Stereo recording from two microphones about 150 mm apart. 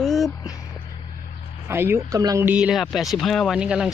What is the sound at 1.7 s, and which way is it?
Speech, 15° right (ahead or behind).